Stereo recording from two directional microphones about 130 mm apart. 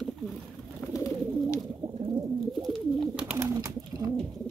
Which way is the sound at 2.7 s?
5° right (ahead or behind).